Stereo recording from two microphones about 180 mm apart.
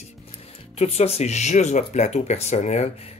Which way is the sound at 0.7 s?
35° left (ahead or behind).